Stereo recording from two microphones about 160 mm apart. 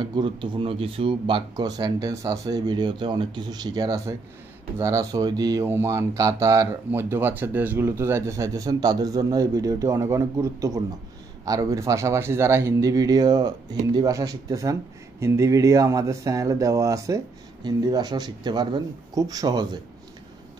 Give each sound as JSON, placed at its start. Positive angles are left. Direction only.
{"t": 0.0, "sound": "speech", "side_deg": -30}